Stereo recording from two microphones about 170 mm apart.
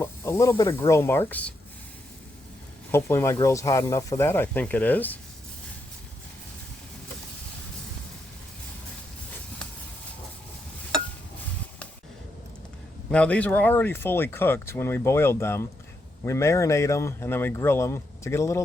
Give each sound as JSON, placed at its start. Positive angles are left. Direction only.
{"t": 0.0, "sound": "snake", "side_deg": 15}
{"t": 0.9, "sound": "speech", "side_deg": 15}
{"t": 2.9, "sound": "speech", "side_deg": 15}
{"t": 13.1, "sound": "speech", "side_deg": 5}